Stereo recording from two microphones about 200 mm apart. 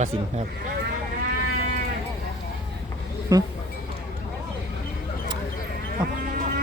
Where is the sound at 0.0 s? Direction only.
30° right (ahead or behind).